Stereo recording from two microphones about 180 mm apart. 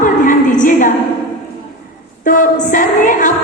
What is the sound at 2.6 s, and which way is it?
Speech, 45° left (ahead or behind).